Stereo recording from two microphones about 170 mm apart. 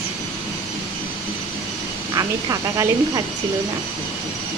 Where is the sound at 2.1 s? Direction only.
20° right (ahead or behind).